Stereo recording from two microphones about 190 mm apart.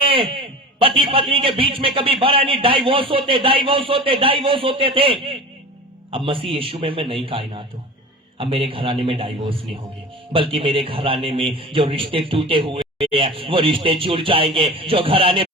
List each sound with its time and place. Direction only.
0.0 s a man's voice: 30° right (ahead or behind)